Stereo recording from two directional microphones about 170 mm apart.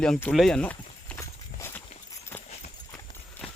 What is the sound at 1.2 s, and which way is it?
Horse, 15° left (ahead or behind).